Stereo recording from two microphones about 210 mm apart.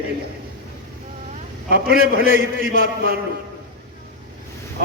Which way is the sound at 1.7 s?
45° right (ahead or behind).